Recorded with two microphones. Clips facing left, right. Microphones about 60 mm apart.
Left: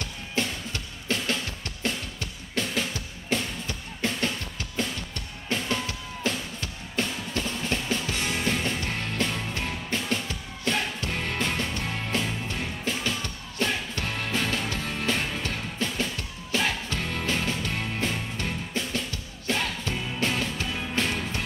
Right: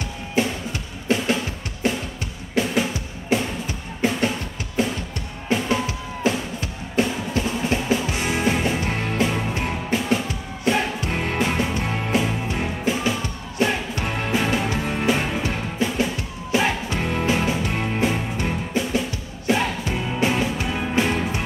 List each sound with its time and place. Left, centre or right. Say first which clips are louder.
1.0 s drum: right 7 dB; centre
2.5 s music: right 7 dB; centre